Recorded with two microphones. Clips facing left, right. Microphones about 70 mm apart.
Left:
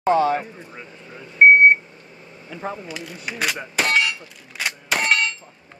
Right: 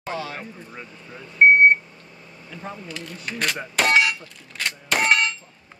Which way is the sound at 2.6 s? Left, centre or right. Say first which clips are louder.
Left 6 dB; left.